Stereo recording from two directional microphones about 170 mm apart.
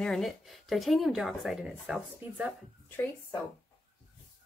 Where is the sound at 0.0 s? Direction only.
Centre (ahead or behind).